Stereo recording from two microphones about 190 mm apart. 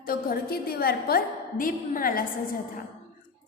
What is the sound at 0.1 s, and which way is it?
A woman's voice, 50° left (ahead or behind).